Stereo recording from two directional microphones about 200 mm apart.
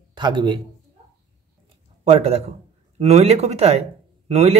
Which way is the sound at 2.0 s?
30° right (ahead or behind).